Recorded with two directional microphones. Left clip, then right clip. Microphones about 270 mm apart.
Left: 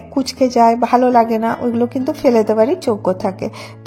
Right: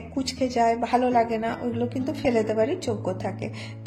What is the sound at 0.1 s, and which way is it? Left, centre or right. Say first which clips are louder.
A woman's voice: left 11 dB; left.